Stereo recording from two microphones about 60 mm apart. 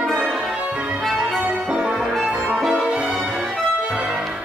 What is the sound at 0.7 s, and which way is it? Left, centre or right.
Music, centre.